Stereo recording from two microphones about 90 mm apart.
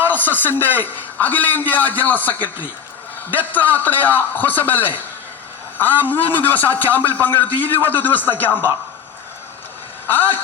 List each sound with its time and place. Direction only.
0.1 s a man's voice: 20° left (ahead or behind)
10.1 s a man's voice: 20° left (ahead or behind)